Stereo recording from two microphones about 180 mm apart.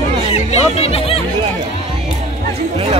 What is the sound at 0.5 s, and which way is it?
Speech, 35° left (ahead or behind).